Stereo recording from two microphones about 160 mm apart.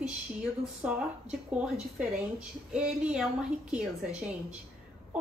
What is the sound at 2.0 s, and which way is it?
A woman's voice, 5° right (ahead or behind).